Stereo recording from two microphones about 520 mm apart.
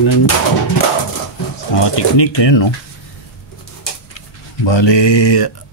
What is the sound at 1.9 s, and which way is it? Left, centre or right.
Speech, left.